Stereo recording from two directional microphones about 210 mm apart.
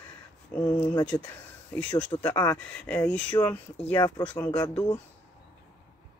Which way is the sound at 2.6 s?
5° left (ahead or behind).